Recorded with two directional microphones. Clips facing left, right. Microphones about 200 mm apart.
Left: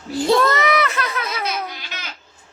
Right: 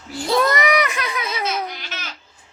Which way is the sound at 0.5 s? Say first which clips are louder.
Even; 15° right (ahead or behind).